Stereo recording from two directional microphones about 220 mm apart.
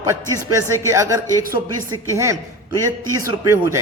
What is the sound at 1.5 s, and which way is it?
Speech, 25° right (ahead or behind).